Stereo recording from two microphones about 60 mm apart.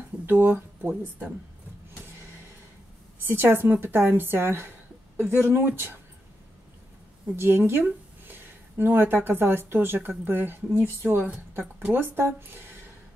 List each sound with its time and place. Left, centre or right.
0.3 s speech: right
3.3 s a woman's voice: right
7.3 s speech: right
11.2 s a woman's voice: right
11.9 s speech: right